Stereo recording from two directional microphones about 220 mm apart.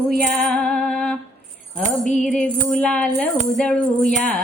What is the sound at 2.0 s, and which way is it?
Music, 35° left (ahead or behind).